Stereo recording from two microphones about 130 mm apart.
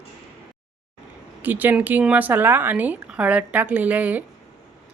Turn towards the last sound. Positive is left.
turn(degrees=-10)  # may be behind; listen again after turning